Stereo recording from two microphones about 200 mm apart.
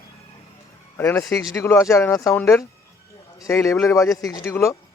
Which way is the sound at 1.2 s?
Centre (ahead or behind).